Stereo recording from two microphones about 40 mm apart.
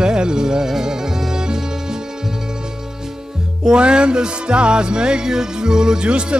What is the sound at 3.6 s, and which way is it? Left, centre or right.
Music, right.